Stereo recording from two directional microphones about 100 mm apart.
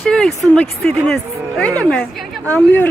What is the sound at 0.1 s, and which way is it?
Speech, 5° left (ahead or behind).